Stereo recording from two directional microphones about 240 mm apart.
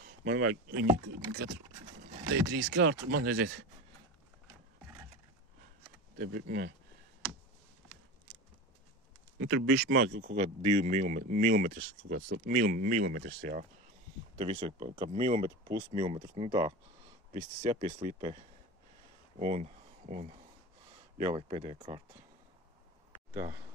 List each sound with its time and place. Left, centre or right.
0.2 s speech: right
1.0 s speech: right
2.5 s speech: right
6.1 s speech: right
9.4 s speech: right
10.3 s speech: right
14.4 s speech: right
19.3 s a sound: right
21.3 s speech: right